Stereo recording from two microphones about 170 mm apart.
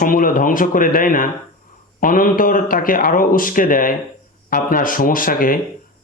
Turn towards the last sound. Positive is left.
turn(degrees=55)  # may be behind; listen again after turning